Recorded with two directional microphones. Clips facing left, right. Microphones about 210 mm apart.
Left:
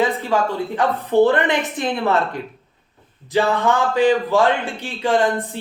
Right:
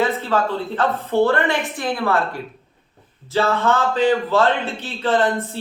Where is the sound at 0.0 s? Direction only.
15° left (ahead or behind).